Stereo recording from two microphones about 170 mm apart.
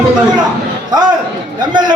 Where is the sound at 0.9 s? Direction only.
25° right (ahead or behind).